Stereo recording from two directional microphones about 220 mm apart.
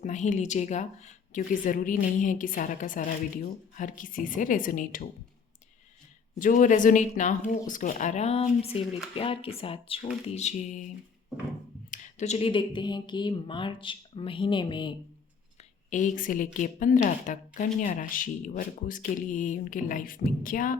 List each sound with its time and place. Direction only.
0.0 s a woman's voice: 35° left (ahead or behind)
6.4 s a woman's voice: 35° left (ahead or behind)
11.9 s speech: 30° left (ahead or behind)
15.9 s a woman's voice: 35° left (ahead or behind)